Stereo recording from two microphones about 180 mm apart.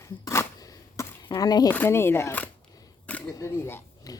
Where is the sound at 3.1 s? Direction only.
10° left (ahead or behind).